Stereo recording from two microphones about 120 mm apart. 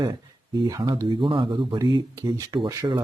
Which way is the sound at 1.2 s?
45° right (ahead or behind).